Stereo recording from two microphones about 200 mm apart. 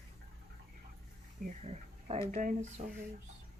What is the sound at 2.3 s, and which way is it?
Speech, 40° right (ahead or behind).